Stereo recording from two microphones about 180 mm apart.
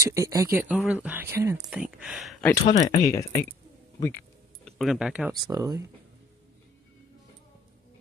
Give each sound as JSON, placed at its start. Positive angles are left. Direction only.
{"t": 0.0, "sound": "speech", "side_deg": -15}
{"t": 2.6, "sound": "speech", "side_deg": 35}
{"t": 3.0, "sound": "speech", "side_deg": 15}
{"t": 4.6, "sound": "speech", "side_deg": 0}
{"t": 5.5, "sound": "speech", "side_deg": -20}